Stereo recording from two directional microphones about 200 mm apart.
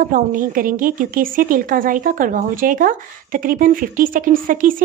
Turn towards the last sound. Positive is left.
turn(degrees=-45)  # may be behind; listen again after turning